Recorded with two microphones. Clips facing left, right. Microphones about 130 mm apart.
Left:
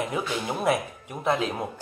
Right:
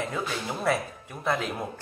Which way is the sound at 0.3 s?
15° left (ahead or behind).